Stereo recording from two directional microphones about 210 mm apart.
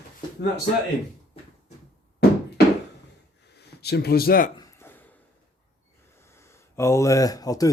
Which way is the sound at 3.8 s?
50° left (ahead or behind).